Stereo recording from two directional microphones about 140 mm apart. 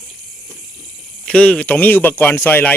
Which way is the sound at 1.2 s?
5° left (ahead or behind).